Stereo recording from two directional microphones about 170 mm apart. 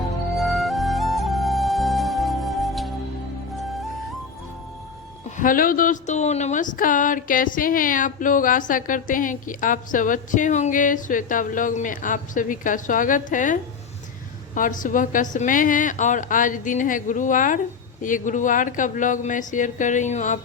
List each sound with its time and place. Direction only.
0.3 s music: centre (ahead or behind)
5.4 s speech: 55° left (ahead or behind)